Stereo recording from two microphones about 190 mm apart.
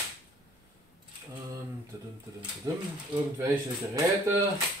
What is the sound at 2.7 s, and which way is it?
Speech, 20° right (ahead or behind).